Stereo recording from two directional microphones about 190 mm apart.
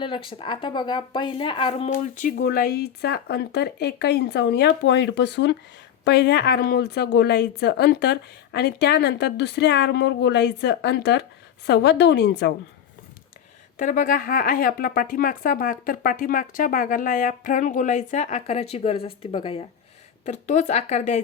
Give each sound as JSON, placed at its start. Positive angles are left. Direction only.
{"t": 0.0, "sound": "speech", "side_deg": 25}
{"t": 1.9, "sound": "a woman's voice", "side_deg": 45}
{"t": 13.7, "sound": "speech", "side_deg": 45}